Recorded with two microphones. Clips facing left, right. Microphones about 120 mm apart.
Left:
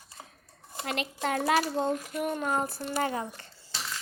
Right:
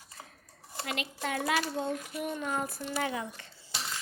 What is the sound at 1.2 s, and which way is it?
Speech, 45° left (ahead or behind).